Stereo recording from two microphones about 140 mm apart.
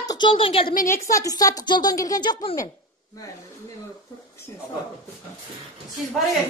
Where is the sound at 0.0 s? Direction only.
25° left (ahead or behind).